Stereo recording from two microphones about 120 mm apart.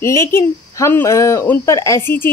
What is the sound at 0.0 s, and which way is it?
A woman's voice, 20° left (ahead or behind).